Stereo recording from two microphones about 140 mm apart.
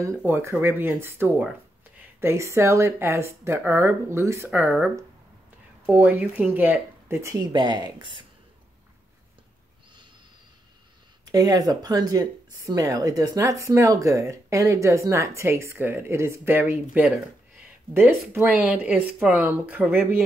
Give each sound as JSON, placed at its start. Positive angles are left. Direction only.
{"t": 0.2, "sound": "speech", "side_deg": -15}
{"t": 7.5, "sound": "speech", "side_deg": -30}
{"t": 11.3, "sound": "speech", "side_deg": -25}
{"t": 18.3, "sound": "speech", "side_deg": -15}